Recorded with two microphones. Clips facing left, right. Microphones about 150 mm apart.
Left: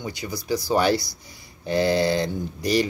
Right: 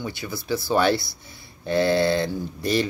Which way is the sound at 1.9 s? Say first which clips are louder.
Right 1 dB; 60° right (ahead or behind).